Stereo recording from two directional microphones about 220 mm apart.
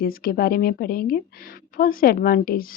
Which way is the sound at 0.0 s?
40° left (ahead or behind).